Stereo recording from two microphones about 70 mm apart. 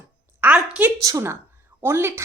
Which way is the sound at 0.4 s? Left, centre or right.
Right.